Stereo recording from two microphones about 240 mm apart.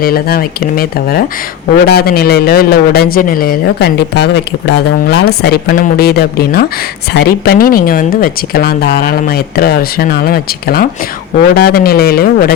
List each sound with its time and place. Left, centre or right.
0.0 s a man's voice: left